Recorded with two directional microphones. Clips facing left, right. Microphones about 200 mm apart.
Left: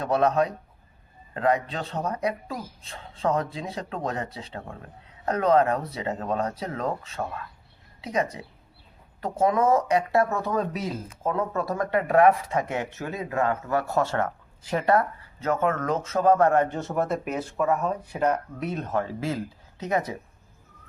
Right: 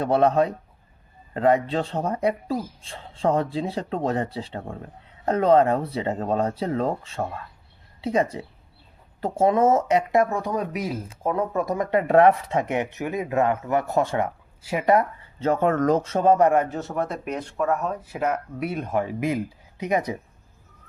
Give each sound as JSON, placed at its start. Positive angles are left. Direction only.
{"t": 0.0, "sound": "speech", "side_deg": -30}
{"t": 15.4, "sound": "speech", "side_deg": -30}